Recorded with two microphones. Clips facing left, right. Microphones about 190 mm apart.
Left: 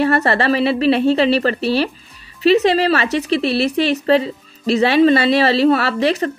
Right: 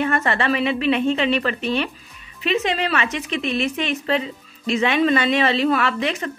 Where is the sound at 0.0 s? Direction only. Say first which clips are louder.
Left 5 dB; 35° left (ahead or behind).